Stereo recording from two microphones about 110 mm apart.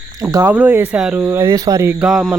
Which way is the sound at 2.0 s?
10° right (ahead or behind).